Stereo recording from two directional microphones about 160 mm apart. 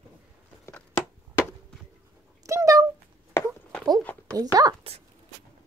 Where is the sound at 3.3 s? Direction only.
15° left (ahead or behind).